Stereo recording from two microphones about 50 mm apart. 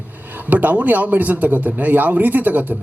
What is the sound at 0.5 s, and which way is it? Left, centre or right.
Speech, right.